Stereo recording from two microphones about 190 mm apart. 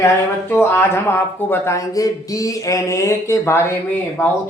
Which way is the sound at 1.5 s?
15° left (ahead or behind).